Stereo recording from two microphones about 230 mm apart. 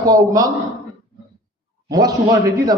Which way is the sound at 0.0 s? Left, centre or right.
Centre.